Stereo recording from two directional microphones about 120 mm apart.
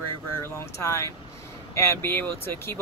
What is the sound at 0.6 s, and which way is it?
Speech, 25° left (ahead or behind).